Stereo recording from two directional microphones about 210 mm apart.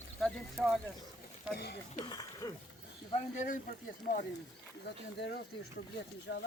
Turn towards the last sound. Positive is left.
turn(degrees=60)  # may be behind; listen again after turning